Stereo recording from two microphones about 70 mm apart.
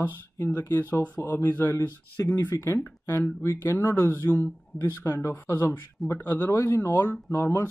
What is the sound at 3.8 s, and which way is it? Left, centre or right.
Speech, left.